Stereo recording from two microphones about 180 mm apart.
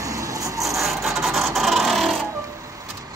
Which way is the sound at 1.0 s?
Centre (ahead or behind).